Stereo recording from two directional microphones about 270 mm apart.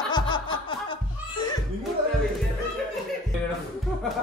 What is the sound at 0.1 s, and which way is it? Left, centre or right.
Music, centre.